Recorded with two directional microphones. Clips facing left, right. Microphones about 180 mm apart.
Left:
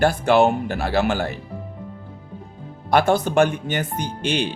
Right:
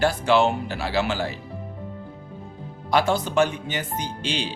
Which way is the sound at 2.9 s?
55° left (ahead or behind).